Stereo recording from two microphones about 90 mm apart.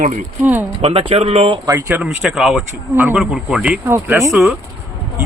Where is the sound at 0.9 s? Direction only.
90° right.